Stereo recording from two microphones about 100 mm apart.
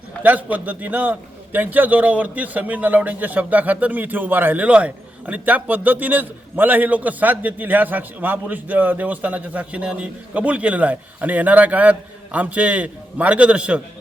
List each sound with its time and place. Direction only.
0.2 s speech: 15° right (ahead or behind)